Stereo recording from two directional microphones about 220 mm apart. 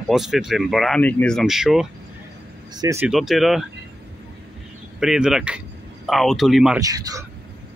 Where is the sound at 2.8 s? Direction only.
15° right (ahead or behind).